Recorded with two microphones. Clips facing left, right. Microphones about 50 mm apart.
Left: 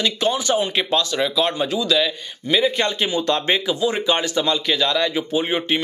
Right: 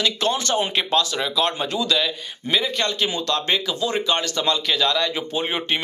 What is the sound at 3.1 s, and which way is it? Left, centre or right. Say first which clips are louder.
Speech: left 3 dB; centre.